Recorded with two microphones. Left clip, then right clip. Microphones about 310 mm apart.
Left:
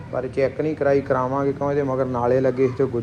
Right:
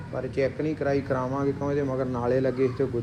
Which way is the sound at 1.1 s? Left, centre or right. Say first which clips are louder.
Left 6 dB; left.